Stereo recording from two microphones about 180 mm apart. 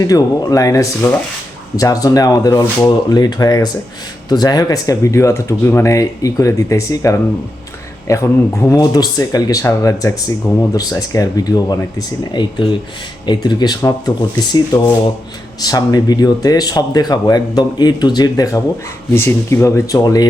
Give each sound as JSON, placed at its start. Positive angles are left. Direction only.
{"t": 0.0, "sound": "speech", "side_deg": 20}